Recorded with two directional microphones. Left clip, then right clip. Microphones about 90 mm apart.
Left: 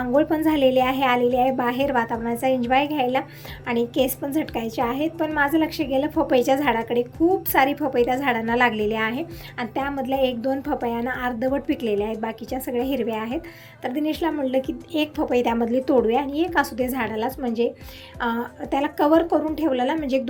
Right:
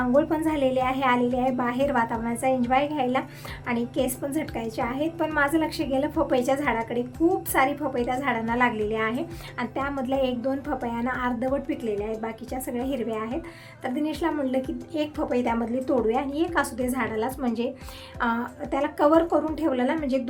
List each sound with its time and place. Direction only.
0.2 s a woman's voice: 25° left (ahead or behind)
5.1 s a woman's voice: 10° left (ahead or behind)
9.9 s a woman's voice: 15° left (ahead or behind)
11.5 s a woman's voice: 35° left (ahead or behind)
12.5 s a woman's voice: 25° left (ahead or behind)
14.9 s a woman's voice: 30° left (ahead or behind)
16.3 s a woman's voice: 20° left (ahead or behind)
17.2 s a woman's voice: 10° left (ahead or behind)